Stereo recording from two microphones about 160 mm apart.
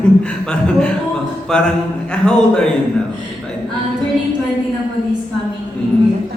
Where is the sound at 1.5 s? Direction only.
5° left (ahead or behind).